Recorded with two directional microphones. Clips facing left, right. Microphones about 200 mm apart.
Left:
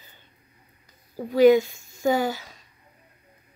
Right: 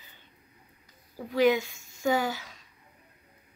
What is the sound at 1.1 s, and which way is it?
Speech, 40° left (ahead or behind).